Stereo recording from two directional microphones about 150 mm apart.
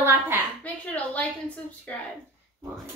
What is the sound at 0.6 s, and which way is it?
Speech, 10° left (ahead or behind).